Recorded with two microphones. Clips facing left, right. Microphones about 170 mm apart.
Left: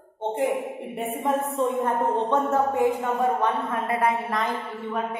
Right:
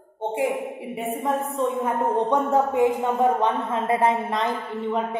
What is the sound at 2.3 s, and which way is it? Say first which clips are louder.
A woman's voice: right 2 dB; 15° right (ahead or behind).